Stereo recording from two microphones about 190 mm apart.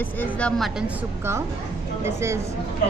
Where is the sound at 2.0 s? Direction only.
15° right (ahead or behind).